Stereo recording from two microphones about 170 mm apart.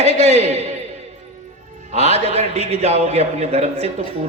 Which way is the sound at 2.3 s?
35° right (ahead or behind).